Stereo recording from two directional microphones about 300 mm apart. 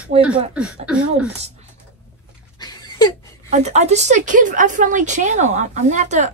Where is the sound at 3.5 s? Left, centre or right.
Right.